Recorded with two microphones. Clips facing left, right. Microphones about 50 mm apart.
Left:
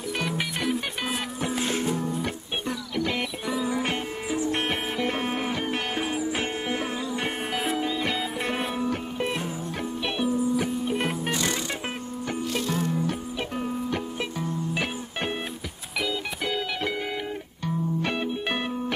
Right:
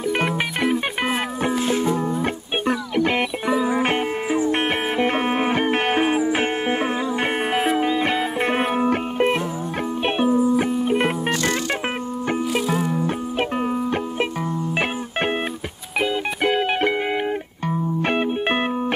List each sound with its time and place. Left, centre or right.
1.5 s music: centre
2.2 s music: right
12.5 s music: centre
13.4 s music: right
16.0 s music: right